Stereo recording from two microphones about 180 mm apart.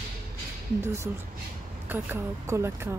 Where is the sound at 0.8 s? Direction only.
15° right (ahead or behind).